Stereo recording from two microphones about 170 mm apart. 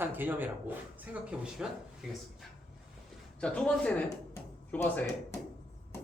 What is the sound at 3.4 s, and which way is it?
A man's voice, 5° left (ahead or behind).